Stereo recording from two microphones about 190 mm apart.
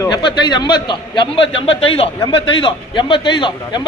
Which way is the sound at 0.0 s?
25° left (ahead or behind).